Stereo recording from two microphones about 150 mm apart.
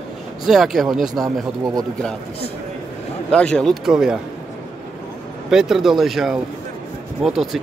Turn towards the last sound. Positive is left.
turn(degrees=0)  # may be behind; listen again after turning